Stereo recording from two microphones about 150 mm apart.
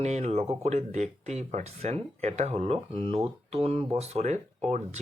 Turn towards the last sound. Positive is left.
turn(degrees=-45)  # may be behind; listen again after turning